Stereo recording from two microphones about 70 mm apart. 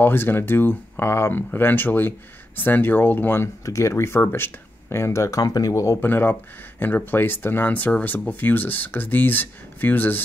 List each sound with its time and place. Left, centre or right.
0.0 s speech: left
3.6 s speech: left
5.4 s speech: left
5.9 s speech: left